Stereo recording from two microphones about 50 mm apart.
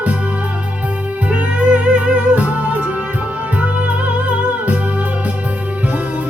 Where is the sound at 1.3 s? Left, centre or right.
Right.